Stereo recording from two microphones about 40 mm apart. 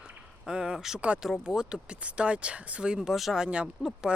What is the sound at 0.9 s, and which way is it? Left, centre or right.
Speech, right.